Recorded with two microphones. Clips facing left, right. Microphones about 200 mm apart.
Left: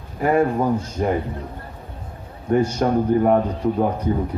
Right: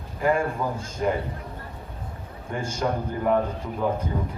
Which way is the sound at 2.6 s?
45° left (ahead or behind).